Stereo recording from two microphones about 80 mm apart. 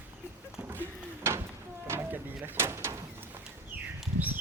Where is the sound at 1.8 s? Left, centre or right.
Right.